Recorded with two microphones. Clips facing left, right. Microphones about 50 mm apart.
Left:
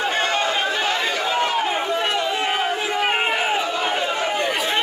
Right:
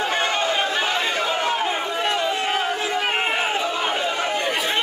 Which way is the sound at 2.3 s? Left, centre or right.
Centre.